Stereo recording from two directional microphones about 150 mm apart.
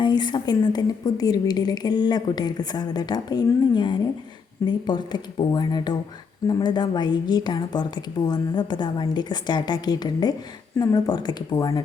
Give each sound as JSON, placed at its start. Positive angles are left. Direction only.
{"t": 0.0, "sound": "a woman's voice", "side_deg": 30}